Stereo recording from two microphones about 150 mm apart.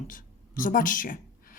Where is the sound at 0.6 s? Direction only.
65° left (ahead or behind).